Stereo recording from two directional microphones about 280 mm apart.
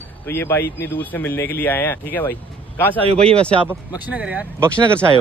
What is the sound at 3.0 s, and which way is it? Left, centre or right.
Speech, right.